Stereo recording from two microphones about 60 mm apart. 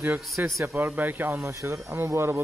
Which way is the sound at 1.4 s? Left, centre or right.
Right.